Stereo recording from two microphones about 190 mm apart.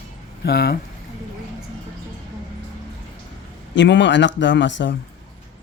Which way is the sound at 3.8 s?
70° left (ahead or behind).